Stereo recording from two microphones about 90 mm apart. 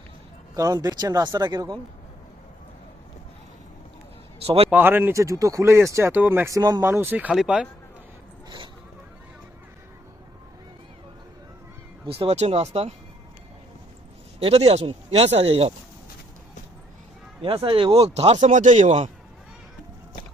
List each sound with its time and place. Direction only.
0.5 s speech: 45° right (ahead or behind)
4.4 s speech: 90° right
4.7 s speech: 20° right (ahead or behind)
5.1 s speech: 35° right (ahead or behind); by 6.5 s 20° right (ahead or behind)
6.5 s speech: 45° right (ahead or behind)
6.8 s speech: 25° right (ahead or behind)
7.3 s speech: 10° right (ahead or behind)
8.4 s speech: 65° right (ahead or behind)
12.0 s speech: 90° right
14.4 s speech: 90° right
17.4 s speech: 80° right